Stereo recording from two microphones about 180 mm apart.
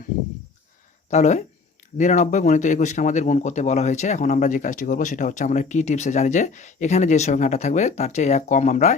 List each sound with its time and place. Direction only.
1.1 s speech: 40° left (ahead or behind)